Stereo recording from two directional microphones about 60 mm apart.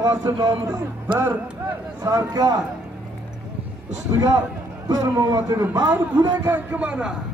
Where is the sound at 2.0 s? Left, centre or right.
Right.